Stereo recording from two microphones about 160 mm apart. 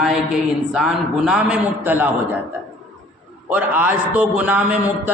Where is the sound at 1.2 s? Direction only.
5° right (ahead or behind).